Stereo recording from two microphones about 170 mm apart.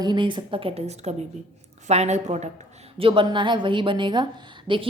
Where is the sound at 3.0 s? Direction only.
30° right (ahead or behind).